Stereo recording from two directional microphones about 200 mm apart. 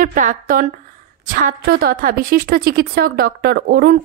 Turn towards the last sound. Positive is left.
turn(degrees=-50)  # may be behind; listen again after turning